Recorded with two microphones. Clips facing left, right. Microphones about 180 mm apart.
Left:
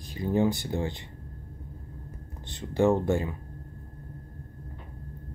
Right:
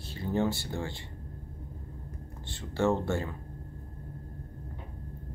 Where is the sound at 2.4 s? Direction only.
15° left (ahead or behind).